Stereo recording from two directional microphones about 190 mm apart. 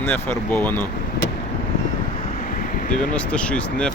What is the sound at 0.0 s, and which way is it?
Speech, 10° left (ahead or behind).